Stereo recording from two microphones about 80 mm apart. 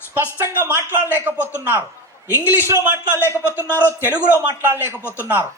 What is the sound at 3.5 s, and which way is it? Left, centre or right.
Speech, left.